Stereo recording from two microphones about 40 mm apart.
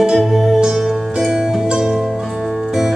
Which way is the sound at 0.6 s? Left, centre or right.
Centre.